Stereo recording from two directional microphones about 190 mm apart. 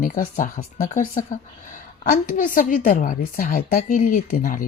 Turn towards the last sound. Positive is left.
turn(degrees=45)  # may be behind; listen again after turning